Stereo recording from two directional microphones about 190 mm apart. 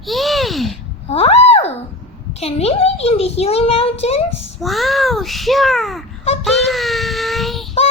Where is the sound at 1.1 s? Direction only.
30° left (ahead or behind).